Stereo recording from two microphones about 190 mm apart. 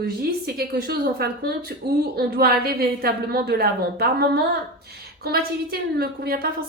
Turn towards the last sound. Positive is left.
turn(degrees=-55)  # may be behind; listen again after turning